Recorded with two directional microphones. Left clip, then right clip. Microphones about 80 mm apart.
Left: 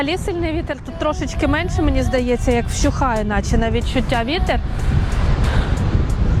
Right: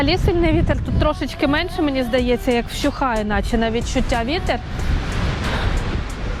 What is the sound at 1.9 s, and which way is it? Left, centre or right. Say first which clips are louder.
Speech: even; centre.